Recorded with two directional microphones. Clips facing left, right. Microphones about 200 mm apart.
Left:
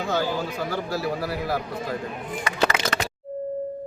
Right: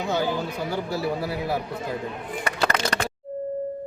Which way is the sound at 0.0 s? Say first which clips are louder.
Even; 20° right (ahead or behind).